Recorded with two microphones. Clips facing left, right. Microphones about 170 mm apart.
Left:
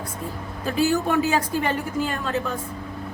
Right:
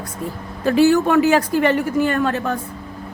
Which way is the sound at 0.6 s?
75° right (ahead or behind).